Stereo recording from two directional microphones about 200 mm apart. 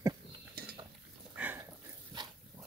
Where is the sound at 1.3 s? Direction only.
10° right (ahead or behind).